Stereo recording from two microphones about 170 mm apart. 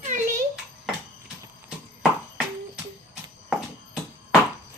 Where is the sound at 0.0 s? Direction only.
45° right (ahead or behind).